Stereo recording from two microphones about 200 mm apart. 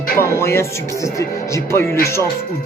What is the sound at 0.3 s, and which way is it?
Music, 15° left (ahead or behind).